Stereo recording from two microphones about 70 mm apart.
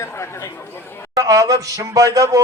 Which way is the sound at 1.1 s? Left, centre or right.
Right.